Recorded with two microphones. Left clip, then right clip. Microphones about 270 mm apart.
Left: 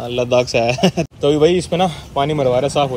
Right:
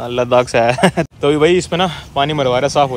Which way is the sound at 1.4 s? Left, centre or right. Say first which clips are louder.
Right 1 dB; right.